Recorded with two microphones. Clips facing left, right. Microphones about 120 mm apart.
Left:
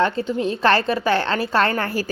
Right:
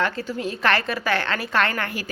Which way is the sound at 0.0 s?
25° left (ahead or behind).